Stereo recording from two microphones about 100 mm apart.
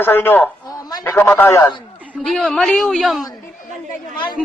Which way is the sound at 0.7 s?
40° left (ahead or behind).